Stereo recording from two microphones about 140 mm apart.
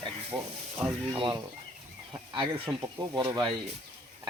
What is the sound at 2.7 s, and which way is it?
Speech, 25° right (ahead or behind).